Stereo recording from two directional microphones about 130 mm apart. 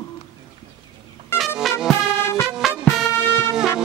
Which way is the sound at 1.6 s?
Centre (ahead or behind).